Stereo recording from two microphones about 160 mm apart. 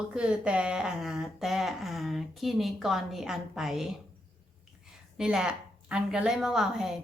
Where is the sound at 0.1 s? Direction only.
5° right (ahead or behind).